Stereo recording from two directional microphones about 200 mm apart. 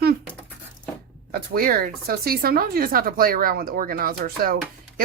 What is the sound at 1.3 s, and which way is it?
Speech, 50° right (ahead or behind).